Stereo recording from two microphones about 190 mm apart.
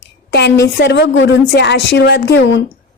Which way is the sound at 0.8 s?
65° left (ahead or behind).